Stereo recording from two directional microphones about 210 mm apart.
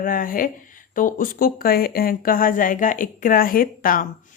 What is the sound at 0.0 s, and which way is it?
Speech, 40° left (ahead or behind).